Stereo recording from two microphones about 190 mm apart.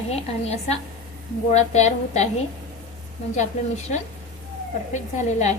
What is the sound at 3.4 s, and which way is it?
A woman's voice, 40° left (ahead or behind).